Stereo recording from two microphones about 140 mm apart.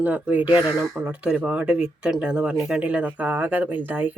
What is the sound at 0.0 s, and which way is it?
Speech, 10° right (ahead or behind).